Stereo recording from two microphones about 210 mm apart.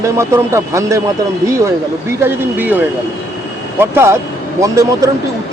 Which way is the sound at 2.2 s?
10° right (ahead or behind).